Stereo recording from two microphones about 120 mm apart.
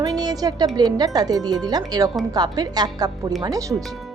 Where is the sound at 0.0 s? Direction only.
35° right (ahead or behind).